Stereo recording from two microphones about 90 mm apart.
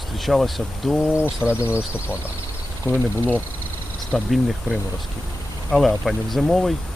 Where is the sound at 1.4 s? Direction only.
25° left (ahead or behind).